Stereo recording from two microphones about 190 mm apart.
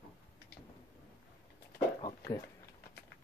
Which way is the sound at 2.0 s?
20° left (ahead or behind).